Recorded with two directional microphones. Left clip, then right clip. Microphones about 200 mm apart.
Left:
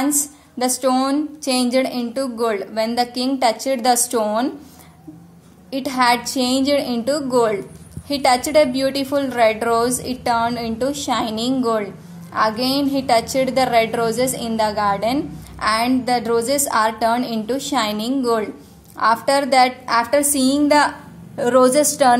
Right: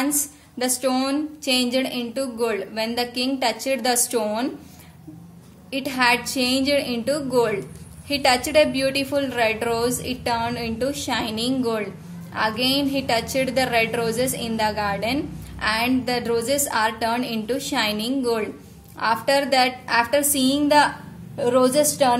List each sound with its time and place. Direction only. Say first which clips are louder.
0.0 s a woman's voice: left 4 dB; 20° left (ahead or behind)
5.7 s a woman's voice: left 3 dB; 25° left (ahead or behind)